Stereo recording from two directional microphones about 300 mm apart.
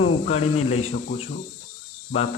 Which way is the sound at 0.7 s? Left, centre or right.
Left.